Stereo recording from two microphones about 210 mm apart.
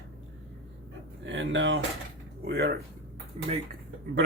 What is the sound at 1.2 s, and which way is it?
Speech, 60° right (ahead or behind).